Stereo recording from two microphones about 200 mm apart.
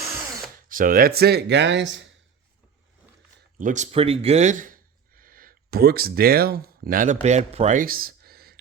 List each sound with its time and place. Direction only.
0.7 s speech: 45° right (ahead or behind); by 2.0 s 65° right (ahead or behind)
3.6 s speech: 40° right (ahead or behind)